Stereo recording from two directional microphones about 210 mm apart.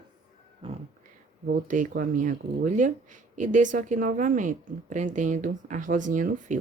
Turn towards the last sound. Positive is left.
turn(degrees=-35)  # may be behind; listen again after turning